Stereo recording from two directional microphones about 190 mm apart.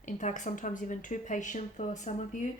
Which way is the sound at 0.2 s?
40° left (ahead or behind).